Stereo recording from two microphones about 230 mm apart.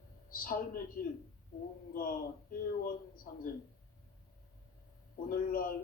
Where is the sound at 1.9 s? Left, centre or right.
Left.